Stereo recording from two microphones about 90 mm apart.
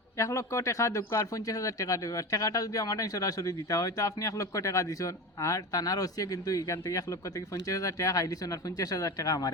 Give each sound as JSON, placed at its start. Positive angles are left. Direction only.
{"t": 0.2, "sound": "speech", "side_deg": 35}